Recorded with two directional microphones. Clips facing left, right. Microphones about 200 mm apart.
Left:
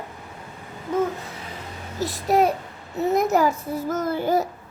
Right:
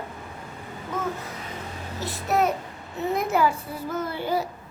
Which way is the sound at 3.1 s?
45° left (ahead or behind).